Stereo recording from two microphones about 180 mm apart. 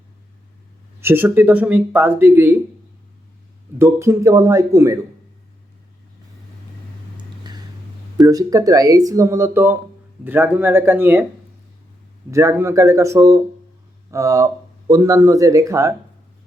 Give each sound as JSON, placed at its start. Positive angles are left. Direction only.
{"t": 1.0, "sound": "speech", "side_deg": -10}
{"t": 3.8, "sound": "speech", "side_deg": -15}
{"t": 8.2, "sound": "speech", "side_deg": -20}
{"t": 12.3, "sound": "speech", "side_deg": -15}